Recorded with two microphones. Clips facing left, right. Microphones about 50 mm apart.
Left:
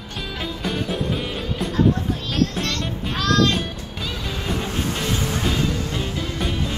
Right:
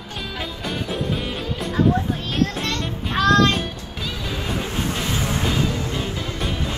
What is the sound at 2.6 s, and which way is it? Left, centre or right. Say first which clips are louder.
Child singing: even; centre.